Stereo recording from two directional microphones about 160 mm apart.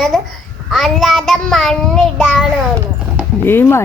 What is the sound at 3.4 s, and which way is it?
Speech, 15° left (ahead or behind).